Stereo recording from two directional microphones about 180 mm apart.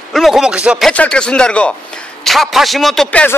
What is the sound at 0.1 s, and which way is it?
A man's voice, centre (ahead or behind).